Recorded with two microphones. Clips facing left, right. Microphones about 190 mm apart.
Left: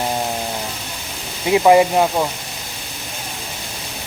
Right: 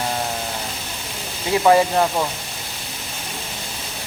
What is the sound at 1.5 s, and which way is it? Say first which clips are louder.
Speech: left 3 dB; 15° left (ahead or behind).